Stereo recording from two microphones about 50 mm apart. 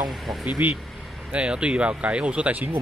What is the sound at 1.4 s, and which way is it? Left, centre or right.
Speech, centre.